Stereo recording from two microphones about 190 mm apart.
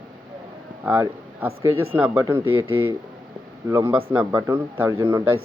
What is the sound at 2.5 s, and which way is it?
Speech, 90° right.